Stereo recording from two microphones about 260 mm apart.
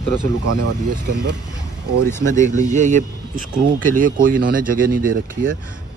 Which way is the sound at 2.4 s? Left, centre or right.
Right.